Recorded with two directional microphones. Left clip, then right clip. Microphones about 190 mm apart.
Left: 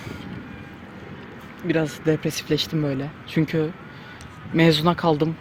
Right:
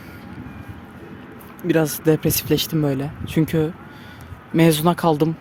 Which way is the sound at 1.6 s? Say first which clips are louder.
Right 4 dB; 25° right (ahead or behind).